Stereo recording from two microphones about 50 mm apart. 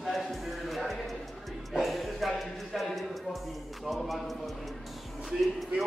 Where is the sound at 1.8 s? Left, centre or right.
Centre.